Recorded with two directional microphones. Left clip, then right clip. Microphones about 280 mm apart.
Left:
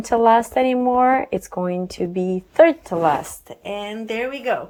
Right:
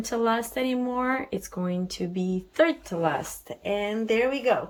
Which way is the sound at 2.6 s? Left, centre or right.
Centre.